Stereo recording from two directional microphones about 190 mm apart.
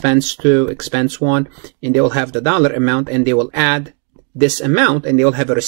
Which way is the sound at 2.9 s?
5° right (ahead or behind).